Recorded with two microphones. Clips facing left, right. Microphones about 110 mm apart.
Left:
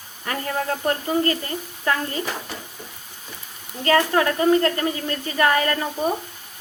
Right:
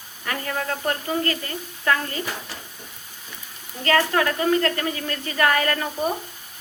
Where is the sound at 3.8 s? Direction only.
25° left (ahead or behind).